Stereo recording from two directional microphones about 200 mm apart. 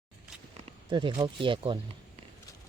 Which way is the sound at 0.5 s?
25° right (ahead or behind).